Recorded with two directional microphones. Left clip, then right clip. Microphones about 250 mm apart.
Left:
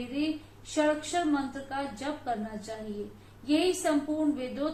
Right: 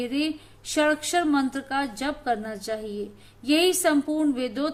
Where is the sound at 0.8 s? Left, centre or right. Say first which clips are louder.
Right 5 dB; right.